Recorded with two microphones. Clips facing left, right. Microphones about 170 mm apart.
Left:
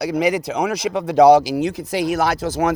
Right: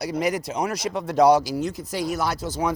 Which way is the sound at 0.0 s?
75° left (ahead or behind).